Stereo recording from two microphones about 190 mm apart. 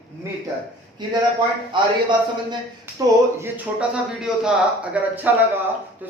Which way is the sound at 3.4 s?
5° right (ahead or behind).